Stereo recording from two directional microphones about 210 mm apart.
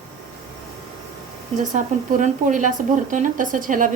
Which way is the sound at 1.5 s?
35° right (ahead or behind).